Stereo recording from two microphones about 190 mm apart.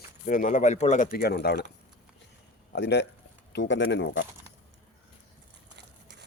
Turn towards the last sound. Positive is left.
turn(degrees=-65)  # may be behind; listen again after turning